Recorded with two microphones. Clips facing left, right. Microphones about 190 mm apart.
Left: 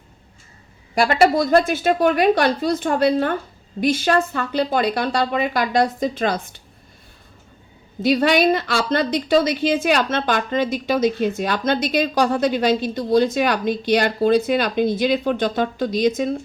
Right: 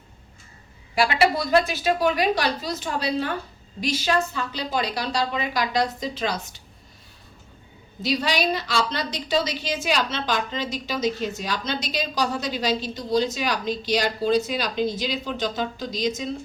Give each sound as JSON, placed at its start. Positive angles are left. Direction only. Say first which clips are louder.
{"t": 0.9, "sound": "a woman's voice", "louder": "left 5 dB", "side_deg": 45}
{"t": 8.0, "sound": "a woman's voice", "louder": "left 8 dB", "side_deg": 55}